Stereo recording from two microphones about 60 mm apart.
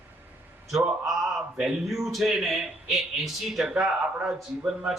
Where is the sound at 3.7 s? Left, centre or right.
Centre.